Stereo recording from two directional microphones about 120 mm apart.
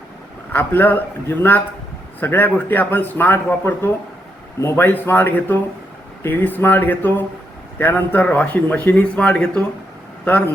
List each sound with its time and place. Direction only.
0.5 s a man's voice: 15° left (ahead or behind)